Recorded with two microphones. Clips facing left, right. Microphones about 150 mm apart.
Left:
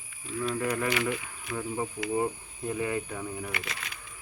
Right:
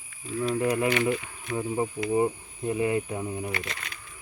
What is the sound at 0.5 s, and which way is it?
Speech, 20° right (ahead or behind).